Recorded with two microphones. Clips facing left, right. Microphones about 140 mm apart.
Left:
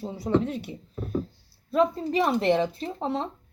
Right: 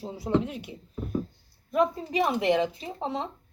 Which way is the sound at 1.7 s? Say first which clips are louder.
Left 2 dB; 15° right (ahead or behind).